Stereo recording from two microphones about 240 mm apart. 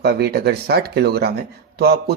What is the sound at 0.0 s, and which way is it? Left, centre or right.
A man's voice, right.